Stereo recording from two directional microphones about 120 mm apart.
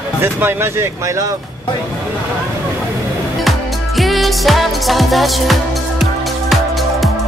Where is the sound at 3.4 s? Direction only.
Centre (ahead or behind).